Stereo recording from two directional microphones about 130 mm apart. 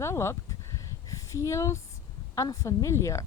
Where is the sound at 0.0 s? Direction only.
20° left (ahead or behind).